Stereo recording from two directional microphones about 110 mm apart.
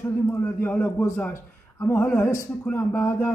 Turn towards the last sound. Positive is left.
turn(degrees=20)  # may be behind; listen again after turning